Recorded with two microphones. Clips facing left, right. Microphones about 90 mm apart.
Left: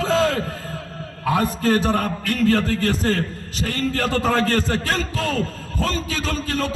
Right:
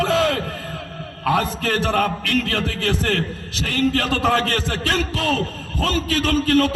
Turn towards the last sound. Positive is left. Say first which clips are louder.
# right 7 dB
turn(degrees=-55)  # may be behind; listen again after turning